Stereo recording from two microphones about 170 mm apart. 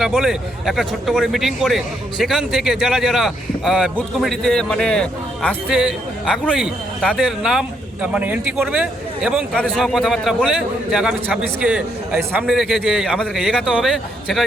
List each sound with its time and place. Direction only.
0.0 s a man's voice: 5° right (ahead or behind)